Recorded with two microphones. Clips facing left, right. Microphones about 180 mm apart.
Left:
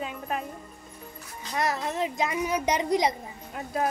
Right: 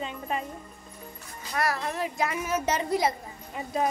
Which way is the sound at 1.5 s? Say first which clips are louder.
Left 1 dB; 20° left (ahead or behind).